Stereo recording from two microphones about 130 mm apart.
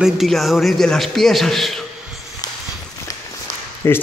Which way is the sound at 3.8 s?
20° left (ahead or behind).